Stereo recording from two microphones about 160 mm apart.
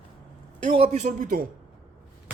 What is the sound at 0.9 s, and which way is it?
Speech, 50° right (ahead or behind).